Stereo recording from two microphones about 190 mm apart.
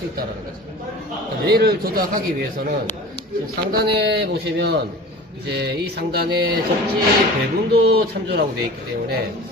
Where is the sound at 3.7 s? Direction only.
60° right (ahead or behind).